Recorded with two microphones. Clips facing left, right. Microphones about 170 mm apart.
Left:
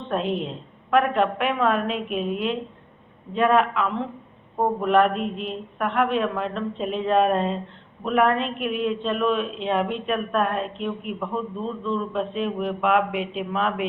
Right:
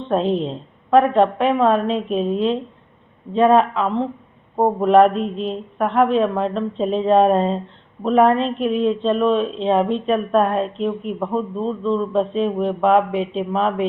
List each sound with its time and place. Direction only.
0.1 s a woman's voice: 35° right (ahead or behind)